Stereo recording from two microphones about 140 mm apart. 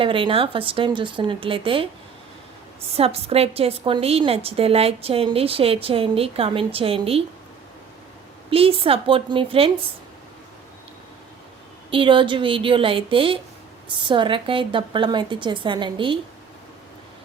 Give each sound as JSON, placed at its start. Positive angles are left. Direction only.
{"t": 0.0, "sound": "a woman's voice", "side_deg": -40}
{"t": 2.9, "sound": "a woman's voice", "side_deg": -45}
{"t": 8.4, "sound": "a woman's voice", "side_deg": -40}
{"t": 11.9, "sound": "a woman's voice", "side_deg": -35}